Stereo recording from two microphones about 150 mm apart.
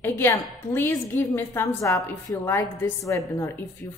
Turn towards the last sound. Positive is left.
turn(degrees=20)  # may be behind; listen again after turning